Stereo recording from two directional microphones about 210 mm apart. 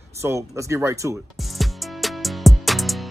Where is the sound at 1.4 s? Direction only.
Centre (ahead or behind).